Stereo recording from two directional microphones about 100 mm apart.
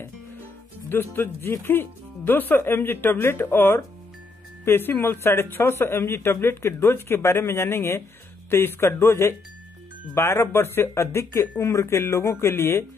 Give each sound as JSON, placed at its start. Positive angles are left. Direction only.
{"t": 0.8, "sound": "speech", "side_deg": 20}